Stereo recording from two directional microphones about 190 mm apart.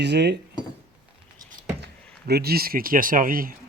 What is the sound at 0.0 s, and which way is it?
Speech, 65° right (ahead or behind).